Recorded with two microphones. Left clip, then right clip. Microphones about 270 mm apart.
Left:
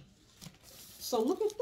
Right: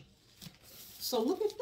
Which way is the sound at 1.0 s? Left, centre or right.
Centre.